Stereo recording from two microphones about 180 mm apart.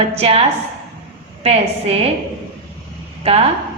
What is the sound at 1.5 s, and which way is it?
Speech, 35° right (ahead or behind).